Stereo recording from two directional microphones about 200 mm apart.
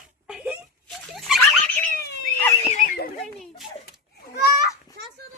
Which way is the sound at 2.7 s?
40° left (ahead or behind).